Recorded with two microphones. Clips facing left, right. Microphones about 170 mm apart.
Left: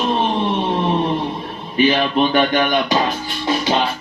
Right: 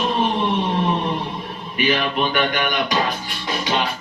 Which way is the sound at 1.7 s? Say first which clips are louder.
Left 5 dB; 30° left (ahead or behind).